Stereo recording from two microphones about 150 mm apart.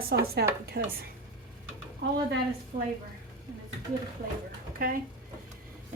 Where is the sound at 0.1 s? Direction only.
90° right.